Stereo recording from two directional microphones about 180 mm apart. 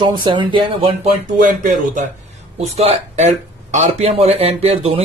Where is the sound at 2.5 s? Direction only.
35° right (ahead or behind).